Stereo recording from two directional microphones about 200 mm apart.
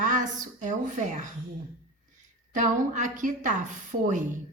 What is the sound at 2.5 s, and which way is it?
A woman's voice, 40° right (ahead or behind).